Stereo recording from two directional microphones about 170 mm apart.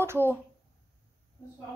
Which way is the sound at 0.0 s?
15° right (ahead or behind).